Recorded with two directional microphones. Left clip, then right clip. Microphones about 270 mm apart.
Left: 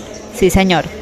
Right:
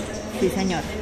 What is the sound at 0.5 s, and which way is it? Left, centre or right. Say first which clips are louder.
Speech: left 12 dB; left.